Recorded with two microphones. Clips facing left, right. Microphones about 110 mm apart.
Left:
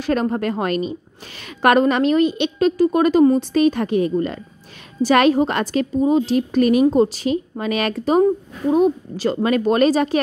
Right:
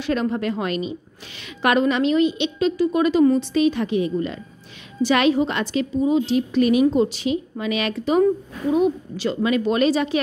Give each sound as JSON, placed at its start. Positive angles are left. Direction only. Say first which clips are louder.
{"t": 0.0, "sound": "a woman's voice", "louder": "left 2 dB", "side_deg": 45}